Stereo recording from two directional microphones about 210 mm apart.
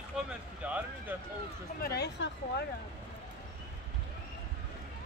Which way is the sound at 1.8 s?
50° left (ahead or behind).